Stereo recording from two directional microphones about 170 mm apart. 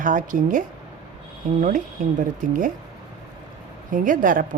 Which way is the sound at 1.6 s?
45° right (ahead or behind).